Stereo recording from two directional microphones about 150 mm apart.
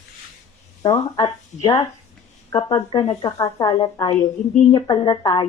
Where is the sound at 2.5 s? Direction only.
25° left (ahead or behind).